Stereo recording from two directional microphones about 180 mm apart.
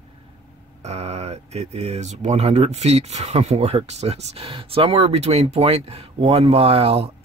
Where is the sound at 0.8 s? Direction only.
35° right (ahead or behind).